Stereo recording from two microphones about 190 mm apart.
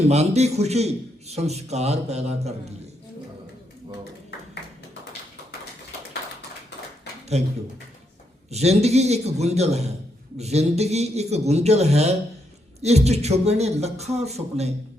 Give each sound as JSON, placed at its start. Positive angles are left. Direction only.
{"t": 0.0, "sound": "speech", "side_deg": -35}
{"t": 8.4, "sound": "speech", "side_deg": -35}